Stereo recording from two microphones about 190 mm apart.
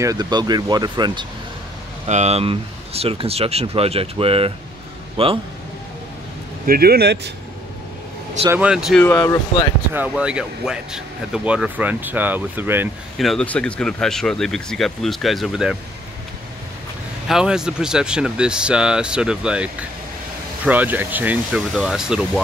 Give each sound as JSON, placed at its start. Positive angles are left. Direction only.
{"t": 0.0, "sound": "speech", "side_deg": -20}
{"t": 2.0, "sound": "a man's voice", "side_deg": -35}
{"t": 6.6, "sound": "speech", "side_deg": -55}
{"t": 8.5, "sound": "speech", "side_deg": -5}
{"t": 9.0, "sound": "speech", "side_deg": 15}
{"t": 9.9, "sound": "speech", "side_deg": -5}
{"t": 13.2, "sound": "speech", "side_deg": 0}
{"t": 17.3, "sound": "speech", "side_deg": -5}